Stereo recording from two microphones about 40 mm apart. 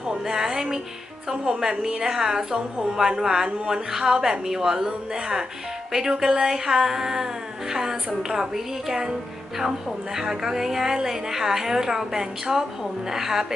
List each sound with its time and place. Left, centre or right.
0.1 s music: centre
1.3 s a woman's voice: centre
10.2 s a woman's voice: centre